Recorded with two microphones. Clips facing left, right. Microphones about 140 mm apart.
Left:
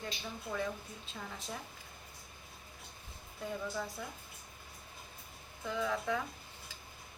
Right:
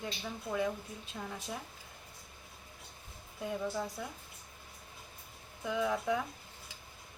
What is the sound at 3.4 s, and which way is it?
Speech, 15° right (ahead or behind).